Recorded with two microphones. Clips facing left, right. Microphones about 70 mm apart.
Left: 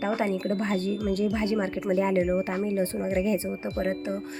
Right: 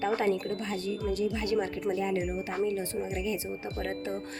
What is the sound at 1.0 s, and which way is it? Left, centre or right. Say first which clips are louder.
Speech: left 1 dB; left.